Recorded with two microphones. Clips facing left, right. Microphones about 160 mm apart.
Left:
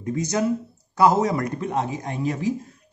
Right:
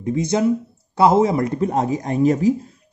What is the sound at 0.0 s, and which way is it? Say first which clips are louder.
Speech: right 5 dB; 25° right (ahead or behind).